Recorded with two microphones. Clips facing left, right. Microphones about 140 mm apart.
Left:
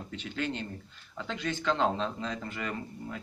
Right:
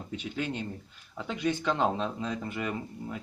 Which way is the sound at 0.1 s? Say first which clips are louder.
Right 1 dB; 10° right (ahead or behind).